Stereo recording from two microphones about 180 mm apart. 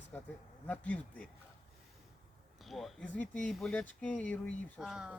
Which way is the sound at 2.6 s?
Centre (ahead or behind).